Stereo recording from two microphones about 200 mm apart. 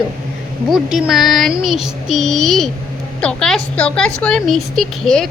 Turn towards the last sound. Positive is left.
turn(degrees=0)  # may be behind; listen again after turning